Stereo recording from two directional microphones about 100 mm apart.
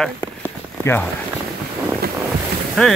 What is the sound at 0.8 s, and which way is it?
Speech, 25° left (ahead or behind).